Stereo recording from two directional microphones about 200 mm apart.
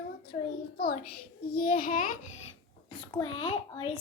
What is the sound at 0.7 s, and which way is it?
A child's voice, 50° left (ahead or behind).